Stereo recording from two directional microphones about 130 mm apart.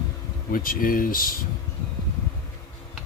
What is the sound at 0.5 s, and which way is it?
Speech, 90° left.